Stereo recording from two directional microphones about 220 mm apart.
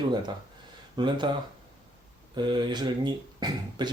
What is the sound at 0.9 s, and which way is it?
Speech, 20° right (ahead or behind).